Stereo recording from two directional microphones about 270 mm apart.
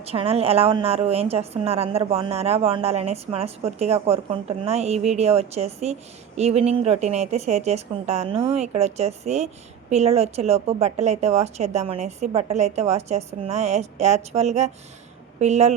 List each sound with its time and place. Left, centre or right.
0.0 s a woman's voice: right